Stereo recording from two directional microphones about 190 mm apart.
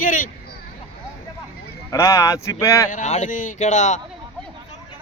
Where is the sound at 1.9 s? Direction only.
15° left (ahead or behind).